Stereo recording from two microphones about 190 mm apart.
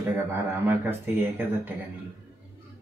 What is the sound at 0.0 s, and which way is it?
Speech, 10° right (ahead or behind).